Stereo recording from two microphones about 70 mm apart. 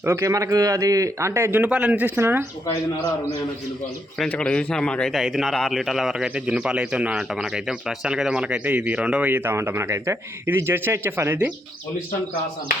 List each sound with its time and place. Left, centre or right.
0.0 s speech: right
1.3 s speech: right
2.1 s speech: right
4.3 s a man's voice: centre
5.1 s speech: centre
6.2 s speech: centre
9.3 s speech: right